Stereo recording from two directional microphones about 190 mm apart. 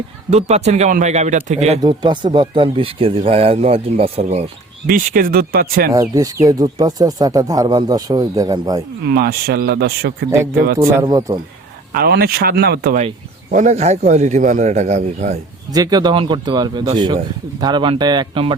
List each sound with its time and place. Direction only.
0.3 s a man's voice: 35° right (ahead or behind)
1.8 s speech: 25° right (ahead or behind)
4.9 s speech: 50° right (ahead or behind)
5.9 s speech: 15° right (ahead or behind)
9.0 s speech: 55° right (ahead or behind)
10.2 s speech: 15° right (ahead or behind)
11.9 s speech: 55° right (ahead or behind)
13.0 s a man's voice: 40° right (ahead or behind)
15.7 s speech: 20° right (ahead or behind)